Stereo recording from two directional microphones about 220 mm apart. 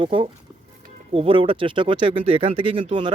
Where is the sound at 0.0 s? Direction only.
25° right (ahead or behind).